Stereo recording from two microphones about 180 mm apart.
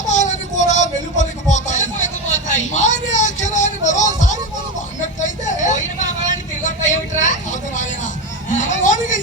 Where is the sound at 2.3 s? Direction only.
40° left (ahead or behind).